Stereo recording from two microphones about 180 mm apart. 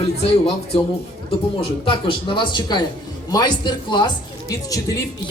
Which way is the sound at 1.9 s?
30° left (ahead or behind).